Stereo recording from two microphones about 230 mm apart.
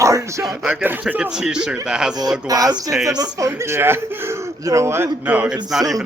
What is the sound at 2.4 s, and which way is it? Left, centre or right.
Speech, centre.